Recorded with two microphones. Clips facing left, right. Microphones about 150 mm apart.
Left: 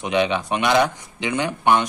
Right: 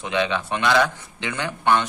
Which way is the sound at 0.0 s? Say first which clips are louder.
Left 3 dB; 15° left (ahead or behind).